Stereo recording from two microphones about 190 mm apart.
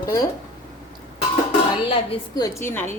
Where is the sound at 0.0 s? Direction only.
20° left (ahead or behind).